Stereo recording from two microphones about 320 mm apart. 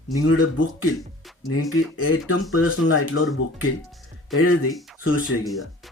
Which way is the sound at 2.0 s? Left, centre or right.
Left.